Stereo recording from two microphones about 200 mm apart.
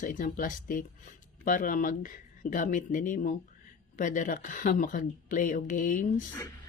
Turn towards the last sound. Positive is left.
turn(degrees=40)  # may be behind; listen again after turning